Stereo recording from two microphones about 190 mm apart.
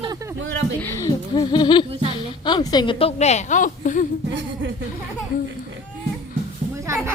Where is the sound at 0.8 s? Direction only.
15° left (ahead or behind); by 4.0 s 40° left (ahead or behind).